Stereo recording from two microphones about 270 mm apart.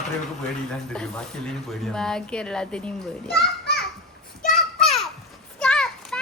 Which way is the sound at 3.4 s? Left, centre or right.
Left.